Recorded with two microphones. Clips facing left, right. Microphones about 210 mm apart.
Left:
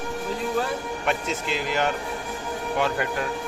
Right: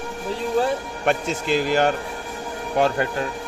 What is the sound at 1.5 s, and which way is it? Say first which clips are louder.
Speech: right 7 dB; 40° right (ahead or behind).